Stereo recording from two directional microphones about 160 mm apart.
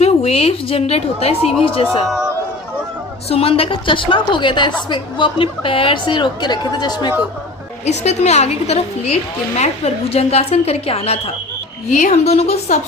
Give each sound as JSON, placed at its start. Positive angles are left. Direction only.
{"t": 0.0, "sound": "a woman's voice", "side_deg": 40}
{"t": 2.0, "sound": "speech", "side_deg": -5}
{"t": 3.2, "sound": "a woman's voice", "side_deg": 35}
{"t": 7.9, "sound": "a woman's voice", "side_deg": 45}